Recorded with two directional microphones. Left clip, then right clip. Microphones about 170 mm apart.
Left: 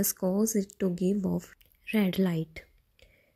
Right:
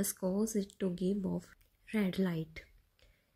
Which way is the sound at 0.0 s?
30° left (ahead or behind).